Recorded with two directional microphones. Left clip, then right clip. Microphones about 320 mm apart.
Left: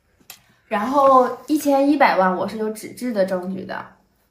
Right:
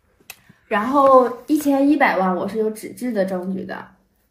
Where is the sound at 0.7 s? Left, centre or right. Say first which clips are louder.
Right 1 dB; centre.